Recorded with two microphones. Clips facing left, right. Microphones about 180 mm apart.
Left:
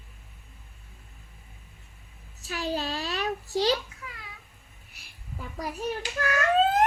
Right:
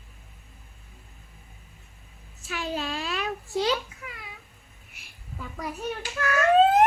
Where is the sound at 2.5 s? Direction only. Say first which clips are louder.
Left 1 dB; 35° left (ahead or behind).